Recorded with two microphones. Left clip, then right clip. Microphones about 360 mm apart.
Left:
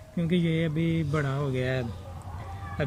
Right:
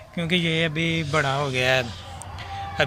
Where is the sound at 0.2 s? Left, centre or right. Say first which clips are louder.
Right 6 dB; centre.